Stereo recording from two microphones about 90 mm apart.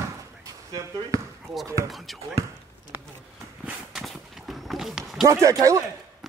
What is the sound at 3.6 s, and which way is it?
Horse, 5° right (ahead or behind).